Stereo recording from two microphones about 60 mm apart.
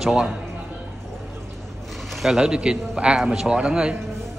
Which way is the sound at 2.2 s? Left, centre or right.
Centre.